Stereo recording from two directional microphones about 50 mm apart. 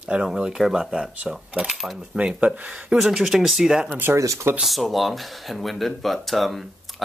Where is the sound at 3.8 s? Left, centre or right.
Right.